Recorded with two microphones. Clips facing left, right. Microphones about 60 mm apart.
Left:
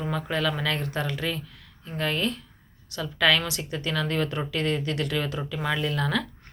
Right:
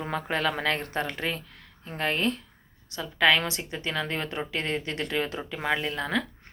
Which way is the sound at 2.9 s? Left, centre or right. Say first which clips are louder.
Even; right.